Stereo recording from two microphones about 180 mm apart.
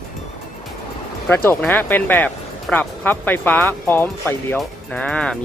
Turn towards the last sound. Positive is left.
turn(degrees=5)  # may be behind; listen again after turning